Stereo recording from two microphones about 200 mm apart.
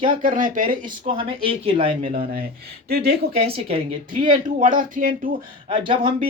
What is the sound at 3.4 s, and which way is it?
Speech, 30° right (ahead or behind).